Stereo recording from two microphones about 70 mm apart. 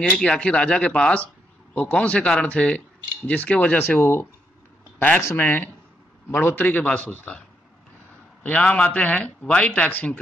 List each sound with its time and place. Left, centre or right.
0.0 s a man's voice: centre